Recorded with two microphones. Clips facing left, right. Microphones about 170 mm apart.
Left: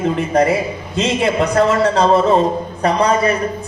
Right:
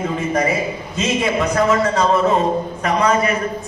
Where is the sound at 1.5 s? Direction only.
30° left (ahead or behind).